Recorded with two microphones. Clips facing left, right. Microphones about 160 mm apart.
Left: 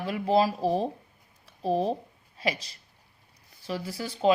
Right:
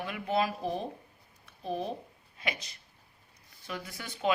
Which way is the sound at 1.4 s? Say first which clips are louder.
Left 8 dB; 35° left (ahead or behind).